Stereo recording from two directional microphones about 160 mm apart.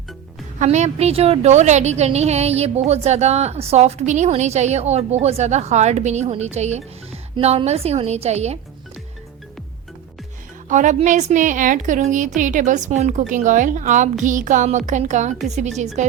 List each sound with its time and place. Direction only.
0.6 s a woman's voice: 45° right (ahead or behind)
10.7 s a woman's voice: 50° right (ahead or behind)